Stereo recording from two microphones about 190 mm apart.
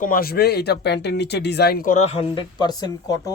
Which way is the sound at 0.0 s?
50° left (ahead or behind).